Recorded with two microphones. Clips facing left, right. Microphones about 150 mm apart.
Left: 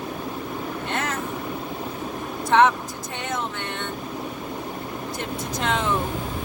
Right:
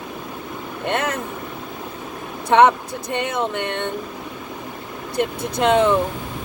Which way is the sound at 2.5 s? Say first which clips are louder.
Right 4 dB; 60° right (ahead or behind).